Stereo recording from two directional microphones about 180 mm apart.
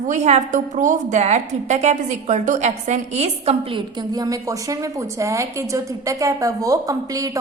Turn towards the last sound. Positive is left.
turn(degrees=-20)  # may be behind; listen again after turning